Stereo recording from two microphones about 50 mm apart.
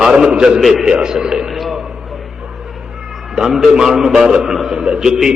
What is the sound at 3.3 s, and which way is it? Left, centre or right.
A man's voice, centre.